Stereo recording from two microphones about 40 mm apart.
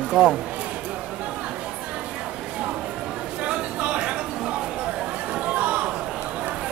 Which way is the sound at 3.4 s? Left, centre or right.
Right.